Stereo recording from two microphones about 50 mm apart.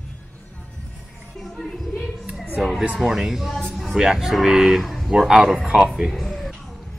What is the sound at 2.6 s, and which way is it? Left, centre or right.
A man's voice, centre.